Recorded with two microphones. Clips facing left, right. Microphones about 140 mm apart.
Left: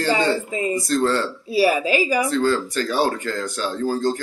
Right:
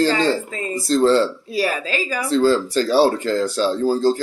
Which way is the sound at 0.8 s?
25° right (ahead or behind).